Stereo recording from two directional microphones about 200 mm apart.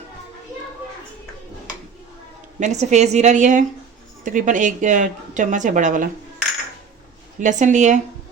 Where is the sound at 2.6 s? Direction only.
35° right (ahead or behind).